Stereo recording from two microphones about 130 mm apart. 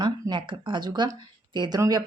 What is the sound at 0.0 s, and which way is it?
A woman's voice, 40° right (ahead or behind).